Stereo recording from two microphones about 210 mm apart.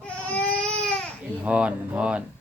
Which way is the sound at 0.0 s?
5° left (ahead or behind).